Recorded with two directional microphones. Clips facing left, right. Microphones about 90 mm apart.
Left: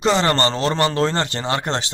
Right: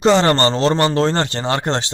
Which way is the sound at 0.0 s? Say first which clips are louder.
Right 4 dB; 30° right (ahead or behind).